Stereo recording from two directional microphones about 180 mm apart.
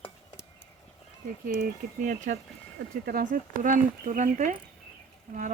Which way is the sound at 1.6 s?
50° right (ahead or behind).